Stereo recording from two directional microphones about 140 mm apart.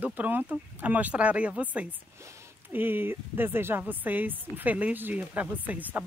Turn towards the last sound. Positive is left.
turn(degrees=-10)  # may be behind; listen again after turning